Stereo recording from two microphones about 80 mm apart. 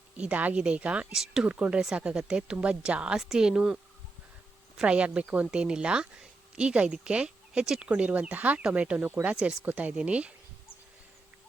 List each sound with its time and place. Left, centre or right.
0.2 s a woman's voice: centre
4.8 s a woman's voice: centre